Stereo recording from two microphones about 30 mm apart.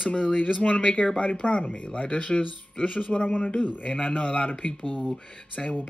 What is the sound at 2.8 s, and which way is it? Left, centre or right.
A man's voice, left.